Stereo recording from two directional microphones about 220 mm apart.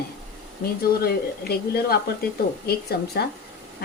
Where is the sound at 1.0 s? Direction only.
45° left (ahead or behind).